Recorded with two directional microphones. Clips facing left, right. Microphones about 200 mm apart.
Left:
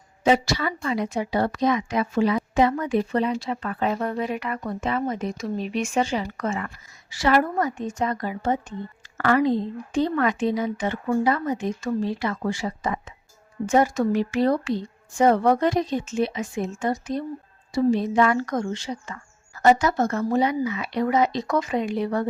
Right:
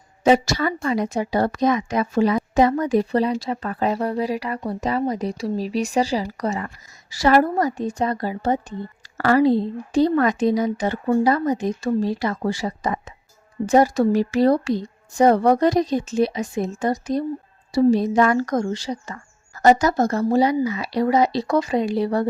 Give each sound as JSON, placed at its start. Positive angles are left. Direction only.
{"t": 0.3, "sound": "a woman's voice", "side_deg": -45}